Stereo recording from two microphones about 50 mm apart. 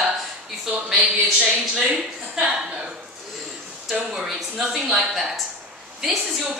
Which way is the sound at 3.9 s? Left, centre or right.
Centre.